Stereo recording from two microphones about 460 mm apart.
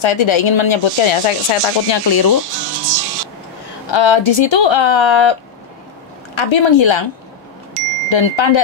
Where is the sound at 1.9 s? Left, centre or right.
Left.